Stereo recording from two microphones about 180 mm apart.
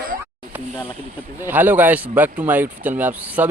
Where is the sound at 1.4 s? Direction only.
10° right (ahead or behind).